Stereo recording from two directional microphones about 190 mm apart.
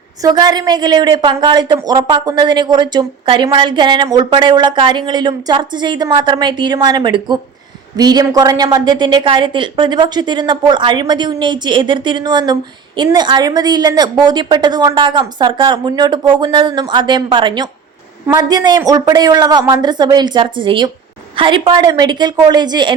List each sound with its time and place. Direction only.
0.2 s a woman's voice: 20° right (ahead or behind)